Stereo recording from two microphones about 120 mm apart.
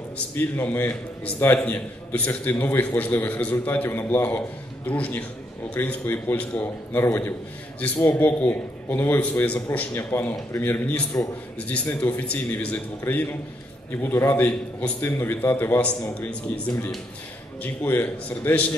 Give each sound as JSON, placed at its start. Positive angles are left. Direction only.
{"t": 0.4, "sound": "a man's voice", "side_deg": 15}